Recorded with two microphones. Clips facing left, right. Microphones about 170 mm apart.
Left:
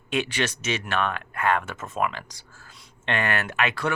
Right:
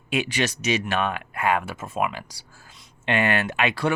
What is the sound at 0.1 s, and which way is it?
Speech, 10° right (ahead or behind).